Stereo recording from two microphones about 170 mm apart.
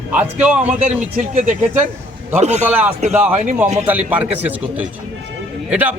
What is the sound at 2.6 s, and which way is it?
A man's voice, 10° right (ahead or behind).